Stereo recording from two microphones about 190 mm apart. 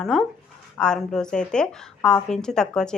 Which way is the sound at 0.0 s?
Centre (ahead or behind).